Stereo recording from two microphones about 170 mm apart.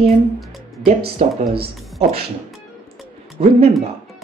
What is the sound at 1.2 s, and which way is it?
Speech, 40° right (ahead or behind).